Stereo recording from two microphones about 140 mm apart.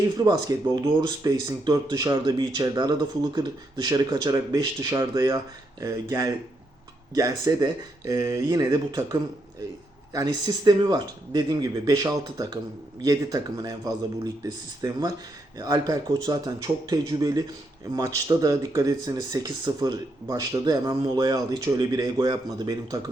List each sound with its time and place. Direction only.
0.3 s speech: 25° right (ahead or behind)